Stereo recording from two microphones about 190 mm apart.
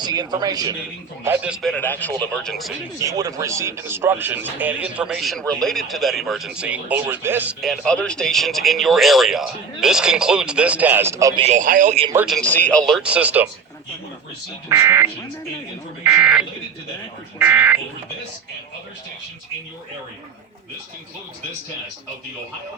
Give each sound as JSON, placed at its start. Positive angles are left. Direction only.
{"t": 0.0, "sound": "a man's voice", "side_deg": -20}
{"t": 1.2, "sound": "speech", "side_deg": -10}
{"t": 1.6, "sound": "speech", "side_deg": 5}
{"t": 3.0, "sound": "speech", "side_deg": -20}
{"t": 7.6, "sound": "speech", "side_deg": 0}
{"t": 11.3, "sound": "speech", "side_deg": -40}
{"t": 12.1, "sound": "speech", "side_deg": 0}
{"t": 12.5, "sound": "speech", "side_deg": 10}
{"t": 14.7, "sound": "speech", "side_deg": -15}